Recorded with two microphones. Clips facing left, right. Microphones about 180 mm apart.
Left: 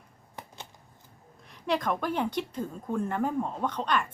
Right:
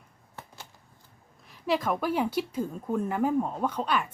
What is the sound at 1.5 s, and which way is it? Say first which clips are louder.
A woman's voice: right 1 dB; 5° right (ahead or behind).